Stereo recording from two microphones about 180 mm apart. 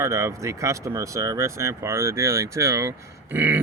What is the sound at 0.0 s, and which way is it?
Speech, 15° right (ahead or behind).